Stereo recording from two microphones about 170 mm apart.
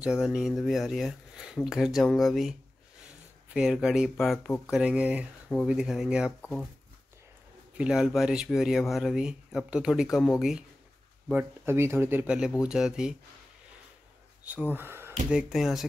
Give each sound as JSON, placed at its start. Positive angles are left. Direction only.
{"t": 0.0, "sound": "speech", "side_deg": -5}
{"t": 3.5, "sound": "speech", "side_deg": -5}
{"t": 7.7, "sound": "speech", "side_deg": -5}
{"t": 11.3, "sound": "speech", "side_deg": -15}
{"t": 14.7, "sound": "speech", "side_deg": -15}
{"t": 15.3, "sound": "speech", "side_deg": 0}